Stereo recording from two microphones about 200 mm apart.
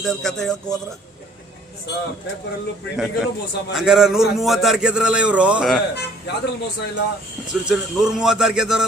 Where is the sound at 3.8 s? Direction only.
Centre (ahead or behind).